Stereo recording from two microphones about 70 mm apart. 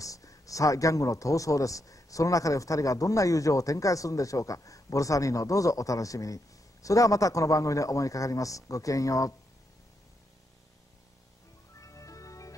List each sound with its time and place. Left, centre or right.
0.0 s speech: left
11.8 s music: left